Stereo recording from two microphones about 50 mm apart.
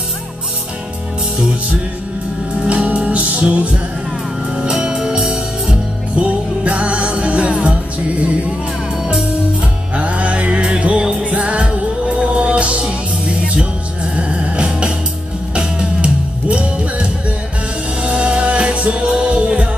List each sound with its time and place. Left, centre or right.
2.6 s music: right
4.6 s music: centre
9.1 s music: right
14.1 s music: right